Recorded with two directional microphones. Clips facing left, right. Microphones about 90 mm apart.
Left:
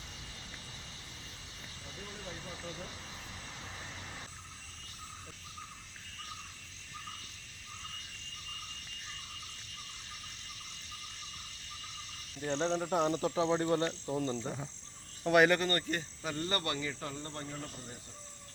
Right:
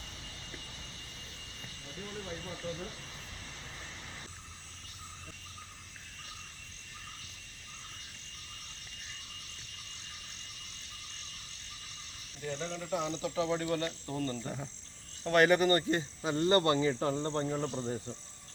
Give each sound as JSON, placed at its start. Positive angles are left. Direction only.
{"t": 12.5, "sound": "a man's voice", "side_deg": 65}
{"t": 13.2, "sound": "speech", "side_deg": 30}
{"t": 14.1, "sound": "speech", "side_deg": 10}
{"t": 15.4, "sound": "speech", "side_deg": -10}
{"t": 15.7, "sound": "speech", "side_deg": -20}